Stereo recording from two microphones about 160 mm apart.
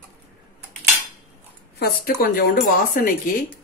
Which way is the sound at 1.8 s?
70° left (ahead or behind).